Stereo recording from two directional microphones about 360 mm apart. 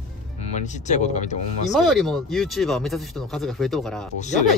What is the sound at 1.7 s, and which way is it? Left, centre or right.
Speech, centre.